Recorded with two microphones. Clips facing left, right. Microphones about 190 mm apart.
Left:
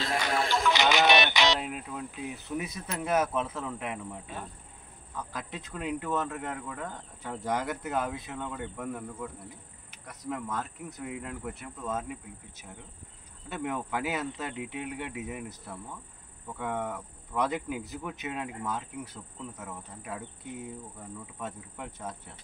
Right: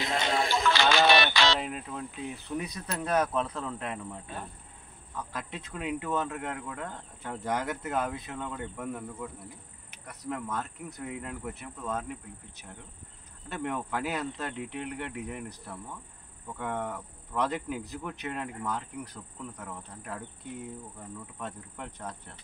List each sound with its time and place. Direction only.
0.0 s a sound: 20° right (ahead or behind)
0.7 s music: 20° left (ahead or behind)
1.6 s speech: 5° left (ahead or behind)
5.1 s speech: centre (ahead or behind)
13.5 s speech: 5° left (ahead or behind)
21.4 s speech: 10° left (ahead or behind)